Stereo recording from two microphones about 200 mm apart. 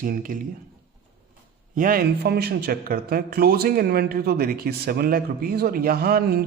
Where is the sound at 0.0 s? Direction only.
45° right (ahead or behind).